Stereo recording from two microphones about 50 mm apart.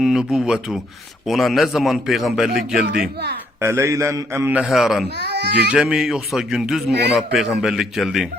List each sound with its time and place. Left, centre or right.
0.0 s speech: centre
1.3 s a man's voice: centre
3.6 s a man's voice: right
4.7 s a man's voice: centre
5.7 s speech: centre
6.1 s a man's voice: centre